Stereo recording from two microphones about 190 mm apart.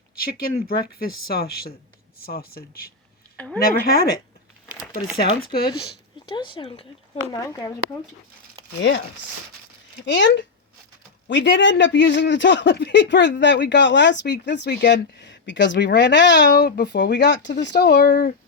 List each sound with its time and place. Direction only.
0.2 s speech: 50° left (ahead or behind)
3.3 s speech: 5° left (ahead or behind)
3.6 s speech: 50° left (ahead or behind)
5.1 s speech: 55° left (ahead or behind)
6.2 s speech: 25° left (ahead or behind)
10.1 s speech: 70° left (ahead or behind); by 18.3 s 55° left (ahead or behind)